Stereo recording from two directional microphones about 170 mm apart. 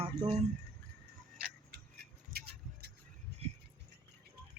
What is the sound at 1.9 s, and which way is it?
Vehicle, 70° right (ahead or behind).